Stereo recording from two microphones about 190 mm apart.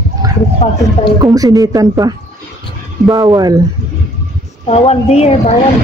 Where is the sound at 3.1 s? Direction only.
25° right (ahead or behind).